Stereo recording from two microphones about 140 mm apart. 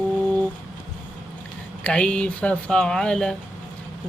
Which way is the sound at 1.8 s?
10° left (ahead or behind).